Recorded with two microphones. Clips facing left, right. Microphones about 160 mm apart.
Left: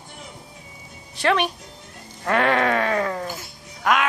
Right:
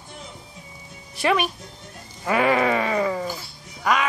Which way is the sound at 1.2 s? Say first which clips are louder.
Left 1 dB; 10° right (ahead or behind).